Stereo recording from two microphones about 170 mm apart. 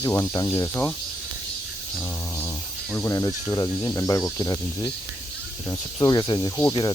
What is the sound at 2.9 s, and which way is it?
Speech, 15° left (ahead or behind).